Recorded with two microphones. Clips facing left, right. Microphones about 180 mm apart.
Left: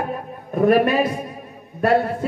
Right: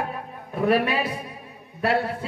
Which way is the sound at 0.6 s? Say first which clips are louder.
Left 5 dB; 45° left (ahead or behind).